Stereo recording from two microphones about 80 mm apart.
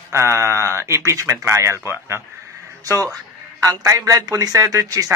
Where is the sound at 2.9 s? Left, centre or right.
Right.